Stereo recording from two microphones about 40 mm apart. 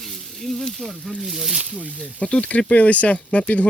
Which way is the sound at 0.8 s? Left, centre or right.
Centre.